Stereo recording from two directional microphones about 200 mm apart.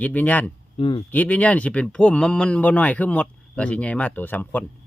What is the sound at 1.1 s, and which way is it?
Speech, 5° left (ahead or behind).